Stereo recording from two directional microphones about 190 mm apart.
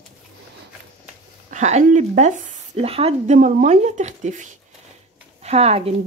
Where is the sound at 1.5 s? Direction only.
40° right (ahead or behind).